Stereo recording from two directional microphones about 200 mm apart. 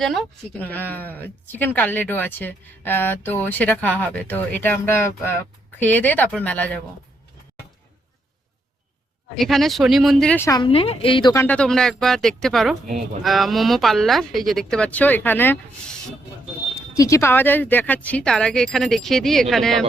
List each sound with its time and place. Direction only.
0.0 s speech: centre (ahead or behind)
9.3 s speech: centre (ahead or behind)
10.7 s speech: 30° left (ahead or behind)
11.4 s speech: 5° left (ahead or behind)
16.7 s speech: 15° left (ahead or behind)